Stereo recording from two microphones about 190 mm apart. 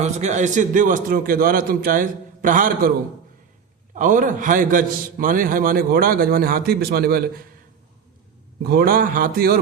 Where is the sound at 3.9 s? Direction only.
45° right (ahead or behind).